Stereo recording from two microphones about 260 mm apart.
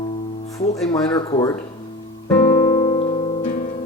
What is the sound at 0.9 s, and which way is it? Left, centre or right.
Speech, centre.